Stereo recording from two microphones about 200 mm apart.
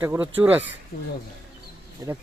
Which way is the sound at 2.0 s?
15° right (ahead or behind).